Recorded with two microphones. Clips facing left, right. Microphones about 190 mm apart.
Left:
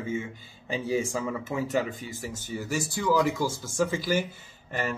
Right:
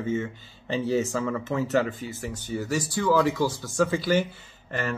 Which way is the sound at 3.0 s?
10° left (ahead or behind).